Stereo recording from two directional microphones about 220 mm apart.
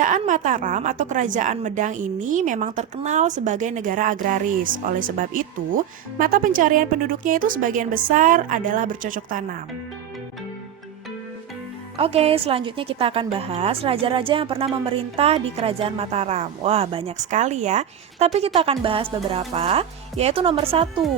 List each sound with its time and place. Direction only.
0.0 s a woman's voice: 35° right (ahead or behind)
11.9 s a woman's voice: 25° right (ahead or behind)